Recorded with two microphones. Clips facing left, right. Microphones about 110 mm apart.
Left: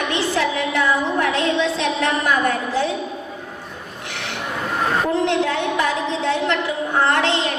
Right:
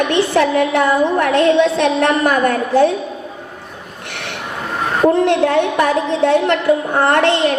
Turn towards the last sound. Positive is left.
turn(degrees=-55)  # may be behind; listen again after turning